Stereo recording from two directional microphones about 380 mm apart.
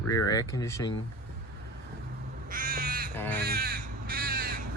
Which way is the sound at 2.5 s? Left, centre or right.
Right.